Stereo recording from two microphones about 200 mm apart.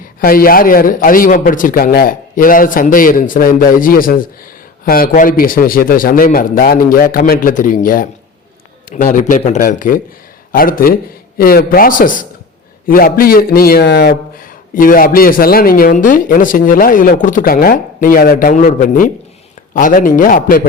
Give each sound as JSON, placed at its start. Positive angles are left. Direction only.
{"t": 0.2, "sound": "a man's voice", "side_deg": 45}
{"t": 14.8, "sound": "speech", "side_deg": 45}